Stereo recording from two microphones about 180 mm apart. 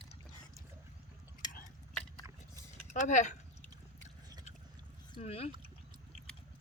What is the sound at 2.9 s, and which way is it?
Speech, 40° left (ahead or behind).